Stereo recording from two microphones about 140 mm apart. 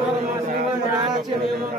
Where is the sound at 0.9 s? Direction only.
30° right (ahead or behind).